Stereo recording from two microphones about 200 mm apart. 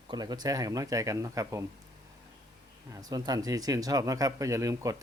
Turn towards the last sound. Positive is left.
turn(degrees=-15)  # may be behind; listen again after turning